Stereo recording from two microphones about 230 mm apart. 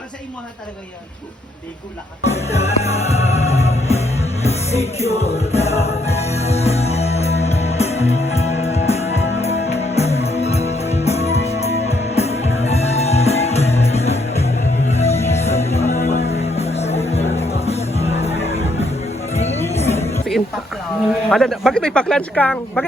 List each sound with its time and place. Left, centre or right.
2.2 s music: left
20.1 s a sound: centre
21.2 s speech: centre